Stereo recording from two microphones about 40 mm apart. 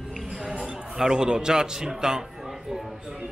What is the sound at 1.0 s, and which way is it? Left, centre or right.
A man's voice, centre.